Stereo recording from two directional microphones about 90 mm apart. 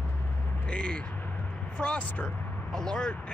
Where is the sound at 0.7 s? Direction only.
10° left (ahead or behind).